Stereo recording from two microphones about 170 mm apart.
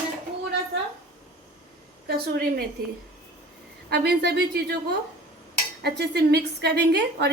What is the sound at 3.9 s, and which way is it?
Speech, 75° right (ahead or behind).